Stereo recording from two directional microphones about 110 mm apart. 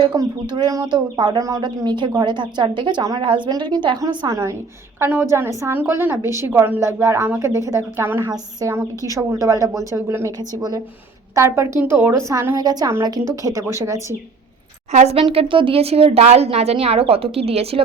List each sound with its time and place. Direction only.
0.1 s a woman's voice: 40° right (ahead or behind)
3.0 s speech: 35° right (ahead or behind)
3.2 s a woman's voice: 45° right (ahead or behind)
4.9 s a woman's voice: 20° right (ahead or behind)
11.3 s a woman's voice: 25° right (ahead or behind)
14.9 s a woman's voice: 80° right
15.3 s speech: 55° right (ahead or behind)